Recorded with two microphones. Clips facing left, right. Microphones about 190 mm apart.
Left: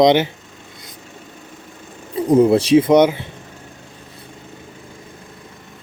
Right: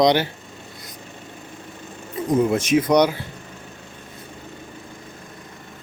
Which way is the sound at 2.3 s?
35° left (ahead or behind).